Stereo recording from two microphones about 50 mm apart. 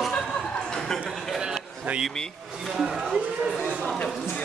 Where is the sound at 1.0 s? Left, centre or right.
Centre.